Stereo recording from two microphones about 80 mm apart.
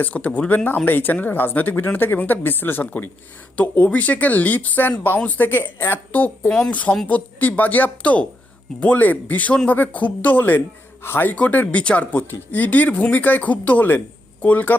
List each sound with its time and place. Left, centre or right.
0.0 s speech: left
6.5 s speech: centre
6.7 s speech: centre